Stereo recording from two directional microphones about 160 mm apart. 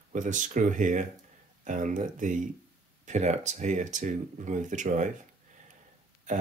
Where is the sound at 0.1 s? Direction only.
55° right (ahead or behind).